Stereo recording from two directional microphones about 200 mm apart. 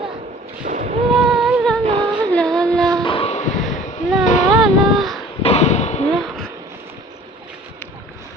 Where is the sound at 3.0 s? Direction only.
25° left (ahead or behind).